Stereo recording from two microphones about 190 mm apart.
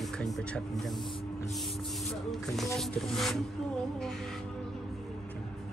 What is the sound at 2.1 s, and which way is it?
Speech, centre (ahead or behind).